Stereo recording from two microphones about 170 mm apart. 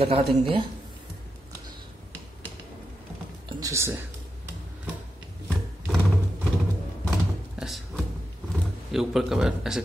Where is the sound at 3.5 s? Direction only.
20° right (ahead or behind).